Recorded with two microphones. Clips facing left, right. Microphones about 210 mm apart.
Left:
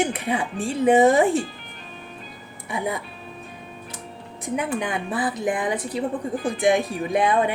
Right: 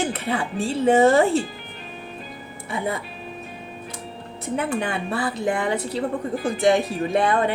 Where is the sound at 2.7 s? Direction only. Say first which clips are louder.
Even; 15° left (ahead or behind).